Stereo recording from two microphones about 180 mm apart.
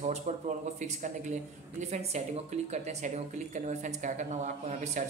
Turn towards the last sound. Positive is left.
turn(degrees=-40)  # may be behind; listen again after turning